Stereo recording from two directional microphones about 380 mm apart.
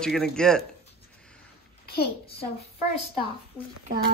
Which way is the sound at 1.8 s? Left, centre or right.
Left.